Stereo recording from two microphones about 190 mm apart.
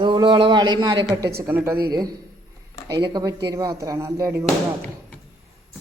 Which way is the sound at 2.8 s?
20° right (ahead or behind).